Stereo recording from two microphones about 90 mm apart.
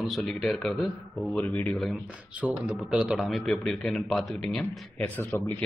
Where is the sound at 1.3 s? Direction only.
20° left (ahead or behind).